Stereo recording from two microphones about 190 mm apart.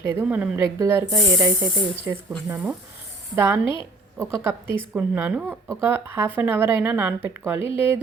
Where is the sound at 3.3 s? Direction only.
15° right (ahead or behind).